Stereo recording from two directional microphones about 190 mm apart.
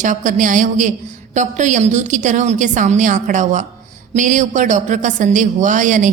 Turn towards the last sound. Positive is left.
turn(degrees=-40)  # may be behind; listen again after turning